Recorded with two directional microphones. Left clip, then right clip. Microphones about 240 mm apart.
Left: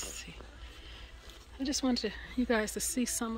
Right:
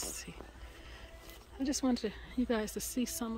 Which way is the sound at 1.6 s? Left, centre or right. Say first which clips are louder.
Left 1 dB; centre.